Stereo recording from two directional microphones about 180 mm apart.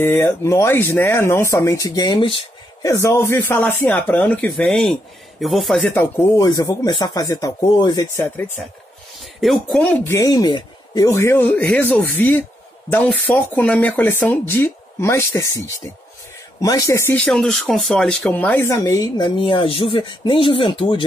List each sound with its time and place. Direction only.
0.0 s speech: 15° left (ahead or behind)
5.9 s speech: 15° left (ahead or behind)
9.4 s speech: centre (ahead or behind); by 15.6 s 20° left (ahead or behind)
16.6 s speech: 20° left (ahead or behind)